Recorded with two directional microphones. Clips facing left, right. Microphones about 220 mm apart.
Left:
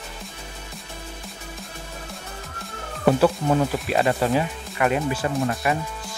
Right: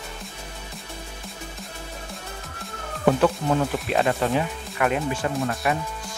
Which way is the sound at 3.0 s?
10° left (ahead or behind).